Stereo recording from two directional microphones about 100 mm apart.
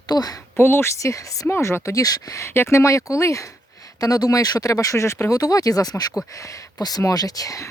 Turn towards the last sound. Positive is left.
turn(degrees=35)  # may be behind; listen again after turning